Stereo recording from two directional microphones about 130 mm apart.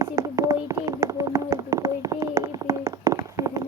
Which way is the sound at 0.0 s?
25° right (ahead or behind).